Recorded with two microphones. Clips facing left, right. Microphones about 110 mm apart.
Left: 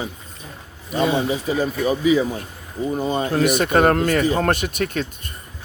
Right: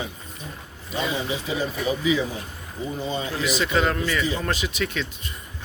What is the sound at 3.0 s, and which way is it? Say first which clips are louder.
Speech: left 8 dB; 50° left (ahead or behind).